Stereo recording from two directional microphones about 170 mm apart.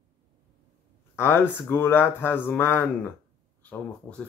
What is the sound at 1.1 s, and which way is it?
Speech, 15° left (ahead or behind).